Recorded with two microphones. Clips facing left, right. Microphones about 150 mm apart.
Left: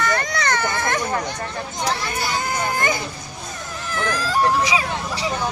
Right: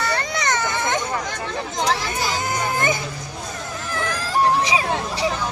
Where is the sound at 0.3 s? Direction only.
20° right (ahead or behind).